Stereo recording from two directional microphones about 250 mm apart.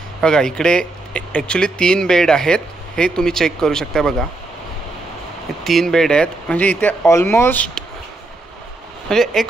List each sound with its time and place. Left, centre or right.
0.2 s speech: centre
5.6 s speech: centre
9.1 s speech: centre